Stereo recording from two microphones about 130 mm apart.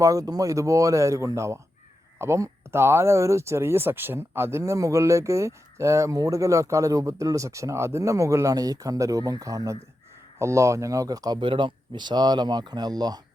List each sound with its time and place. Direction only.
0.0 s speech: 25° right (ahead or behind)